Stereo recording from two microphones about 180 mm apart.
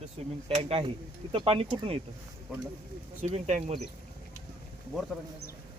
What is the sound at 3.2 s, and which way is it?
Speech, 40° right (ahead or behind).